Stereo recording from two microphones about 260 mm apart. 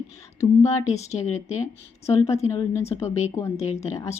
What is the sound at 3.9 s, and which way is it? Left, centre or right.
Speech, centre.